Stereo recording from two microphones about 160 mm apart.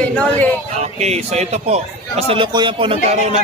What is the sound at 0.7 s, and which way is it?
A man's voice, 45° right (ahead or behind).